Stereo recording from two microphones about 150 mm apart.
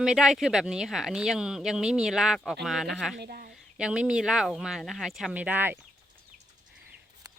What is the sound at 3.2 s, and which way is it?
Speech, 90° right.